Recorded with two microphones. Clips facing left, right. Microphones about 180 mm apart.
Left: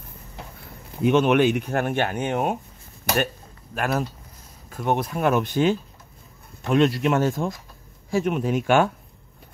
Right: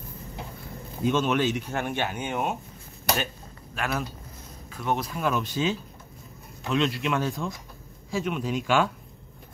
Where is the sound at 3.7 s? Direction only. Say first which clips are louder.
Left 5 dB; 45° left (ahead or behind).